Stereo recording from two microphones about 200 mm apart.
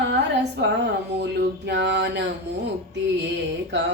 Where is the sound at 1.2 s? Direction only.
60° right (ahead or behind).